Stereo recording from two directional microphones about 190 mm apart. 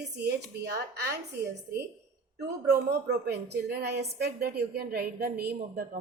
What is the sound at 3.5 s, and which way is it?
A woman's voice, 60° right (ahead or behind).